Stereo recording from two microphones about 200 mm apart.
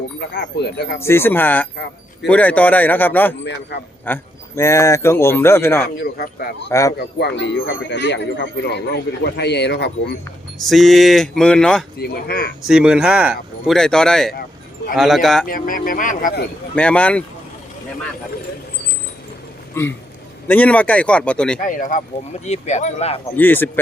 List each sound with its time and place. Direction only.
0.9 s speech: 10° left (ahead or behind)
6.0 s speech: 50° left (ahead or behind)
6.7 s speech: 15° left (ahead or behind)
7.2 s a man's voice: 55° left (ahead or behind)
10.7 s speech: centre (ahead or behind)
11.9 s speech: 50° left (ahead or behind)
12.6 s speech: 5° right (ahead or behind)
15.4 s speech: 45° left (ahead or behind)
16.7 s speech: 5° left (ahead or behind)
19.8 s speech: 15° left (ahead or behind)
21.6 s speech: 40° left (ahead or behind)
23.4 s speech: 10° left (ahead or behind)